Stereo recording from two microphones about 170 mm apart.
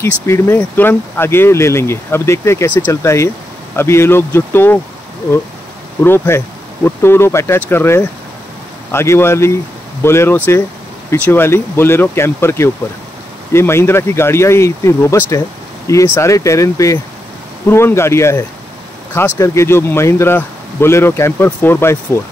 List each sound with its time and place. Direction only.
0.0 s speech: 15° left (ahead or behind)
6.0 s speech: 15° left (ahead or behind)